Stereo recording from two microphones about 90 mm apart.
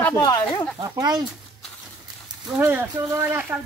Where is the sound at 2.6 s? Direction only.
20° right (ahead or behind).